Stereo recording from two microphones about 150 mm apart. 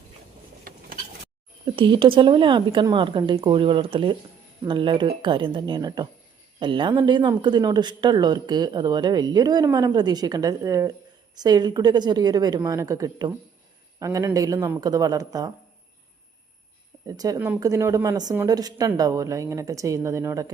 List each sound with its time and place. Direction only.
1.6 s speech: 35° right (ahead or behind)
17.1 s speech: 25° right (ahead or behind)